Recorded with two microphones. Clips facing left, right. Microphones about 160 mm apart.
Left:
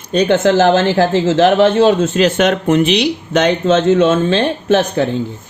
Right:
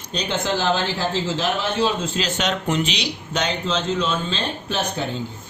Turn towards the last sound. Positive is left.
turn(degrees=65)  # may be behind; listen again after turning